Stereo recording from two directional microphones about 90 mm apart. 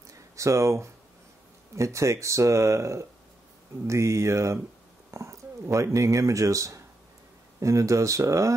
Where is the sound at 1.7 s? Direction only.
35° right (ahead or behind).